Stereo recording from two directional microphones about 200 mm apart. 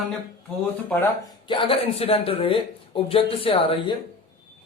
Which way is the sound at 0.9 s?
5° left (ahead or behind).